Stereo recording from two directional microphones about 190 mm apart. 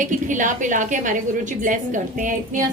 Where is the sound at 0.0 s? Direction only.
40° right (ahead or behind).